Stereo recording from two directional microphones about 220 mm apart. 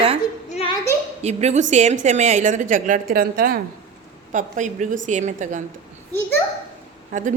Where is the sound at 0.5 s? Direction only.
25° left (ahead or behind).